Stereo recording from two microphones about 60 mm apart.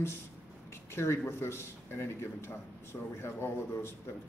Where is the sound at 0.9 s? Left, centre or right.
Left.